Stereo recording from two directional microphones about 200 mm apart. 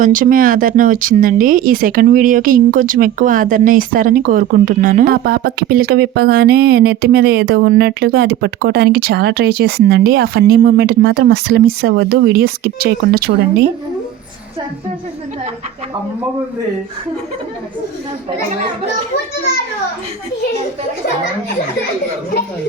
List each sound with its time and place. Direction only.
0.0 s speech: 40° right (ahead or behind)